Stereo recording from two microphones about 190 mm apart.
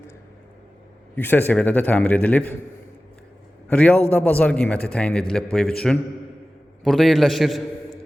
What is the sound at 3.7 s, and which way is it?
A man's voice, 10° left (ahead or behind).